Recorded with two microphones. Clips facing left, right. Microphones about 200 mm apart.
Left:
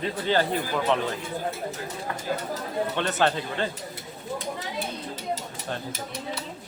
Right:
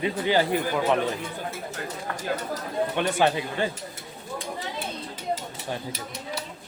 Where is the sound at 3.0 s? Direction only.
10° right (ahead or behind).